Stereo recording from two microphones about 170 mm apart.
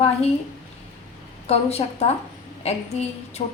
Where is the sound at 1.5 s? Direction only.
40° left (ahead or behind).